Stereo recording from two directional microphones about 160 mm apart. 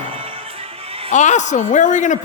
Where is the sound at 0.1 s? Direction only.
35° right (ahead or behind).